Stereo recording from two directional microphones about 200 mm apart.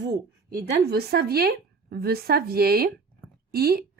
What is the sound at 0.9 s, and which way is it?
A woman's voice, 50° right (ahead or behind).